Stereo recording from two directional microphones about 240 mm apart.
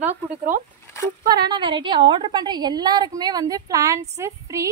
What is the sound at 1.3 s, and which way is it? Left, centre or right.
A woman's voice, centre.